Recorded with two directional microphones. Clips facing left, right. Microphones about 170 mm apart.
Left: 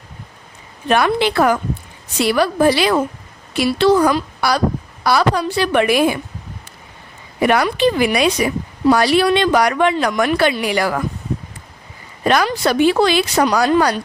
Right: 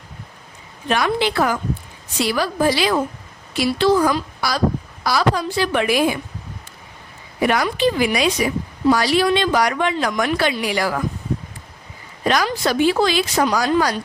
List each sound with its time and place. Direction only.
0.9 s a woman's voice: 60° left (ahead or behind)
7.4 s a woman's voice: 60° left (ahead or behind)
12.2 s a woman's voice: 60° left (ahead or behind)